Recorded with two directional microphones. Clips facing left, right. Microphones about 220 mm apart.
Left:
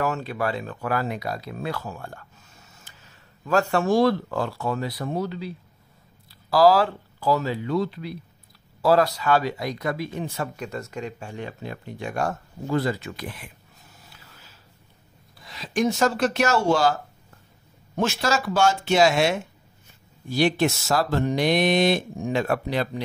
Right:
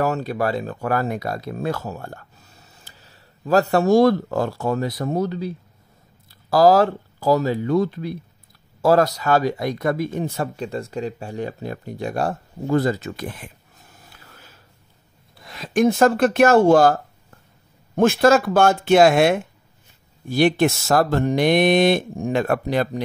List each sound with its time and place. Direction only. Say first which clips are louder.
0.0 s speech: right 4 dB; 40° right (ahead or behind)
6.5 s speech: right 3 dB; 45° right (ahead or behind)
10.5 s speech: right 5 dB; 30° right (ahead or behind); by 13.5 s 45° right (ahead or behind)
14.0 s a sound: right 6 dB; 55° right (ahead or behind)
15.4 s speech: right 6 dB; 55° right (ahead or behind)